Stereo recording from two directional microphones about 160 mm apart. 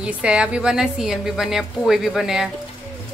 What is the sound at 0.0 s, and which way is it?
A woman's voice, 5° right (ahead or behind).